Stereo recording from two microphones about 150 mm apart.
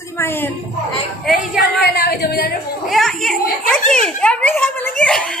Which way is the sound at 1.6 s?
90° left.